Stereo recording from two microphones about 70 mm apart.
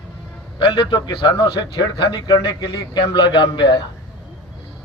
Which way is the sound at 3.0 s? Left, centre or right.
Left.